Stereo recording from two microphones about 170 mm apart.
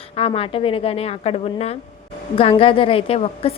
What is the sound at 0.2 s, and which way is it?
A woman's voice, 35° left (ahead or behind).